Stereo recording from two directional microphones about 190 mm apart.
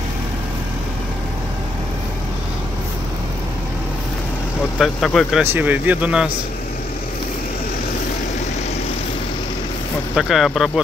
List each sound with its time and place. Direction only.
4.7 s speech: centre (ahead or behind)
5.4 s speech: 10° right (ahead or behind)
10.1 s speech: centre (ahead or behind)